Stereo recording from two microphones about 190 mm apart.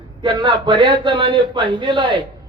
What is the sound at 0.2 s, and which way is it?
A man's voice, 25° right (ahead or behind).